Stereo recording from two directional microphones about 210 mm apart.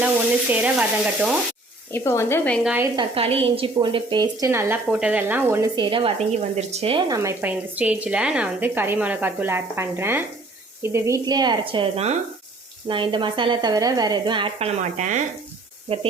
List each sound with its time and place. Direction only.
0.5 s a woman's voice: 5° right (ahead or behind)
1.9 s speech: 10° left (ahead or behind)
2.9 s a woman's voice: 25° right (ahead or behind)
7.2 s a woman's voice: 10° right (ahead or behind)
14.9 s speech: 35° right (ahead or behind)